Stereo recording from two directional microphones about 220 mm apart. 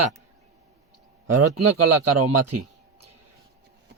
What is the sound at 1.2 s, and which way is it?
A man's voice, 90° right.